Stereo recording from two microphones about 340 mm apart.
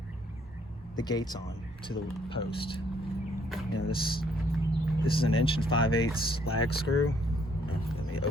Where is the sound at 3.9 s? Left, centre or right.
Centre.